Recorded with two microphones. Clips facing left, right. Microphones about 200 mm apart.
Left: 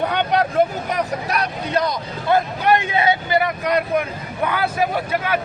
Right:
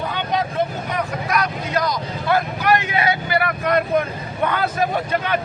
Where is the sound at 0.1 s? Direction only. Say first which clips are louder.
Left 4 dB; 65° left (ahead or behind).